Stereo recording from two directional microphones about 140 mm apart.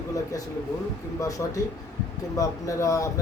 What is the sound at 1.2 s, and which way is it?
Speech, 25° left (ahead or behind).